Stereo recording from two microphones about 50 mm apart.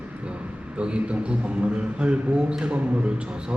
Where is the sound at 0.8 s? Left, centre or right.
Right.